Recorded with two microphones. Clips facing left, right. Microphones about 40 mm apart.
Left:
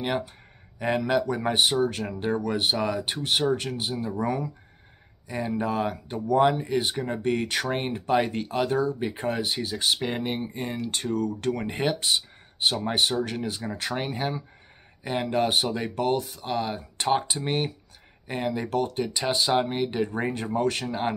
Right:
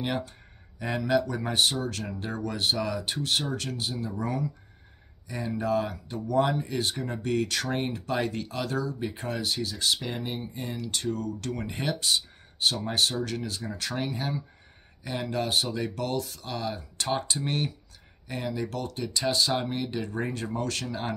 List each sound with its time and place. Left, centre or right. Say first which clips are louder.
0.0 s speech: left 3 dB; left
10.1 s speech: left 5 dB; left
11.7 s speech: right 1 dB; left
18.3 s speech: left 5 dB; left